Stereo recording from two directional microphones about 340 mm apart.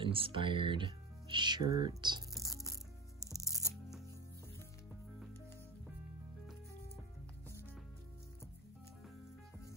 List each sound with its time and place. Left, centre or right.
0.0 s speech: centre
2.3 s music: centre